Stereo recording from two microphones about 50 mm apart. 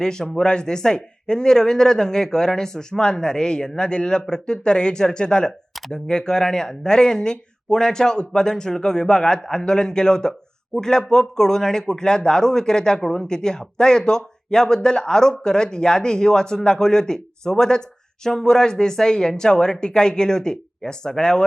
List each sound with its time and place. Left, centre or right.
0.0 s speech: centre